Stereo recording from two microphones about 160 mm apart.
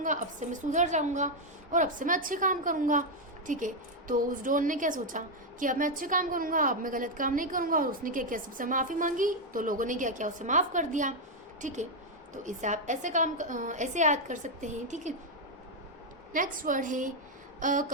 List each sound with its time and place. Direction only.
0.0 s a woman's voice: 50° right (ahead or behind)
16.3 s a woman's voice: 55° right (ahead or behind)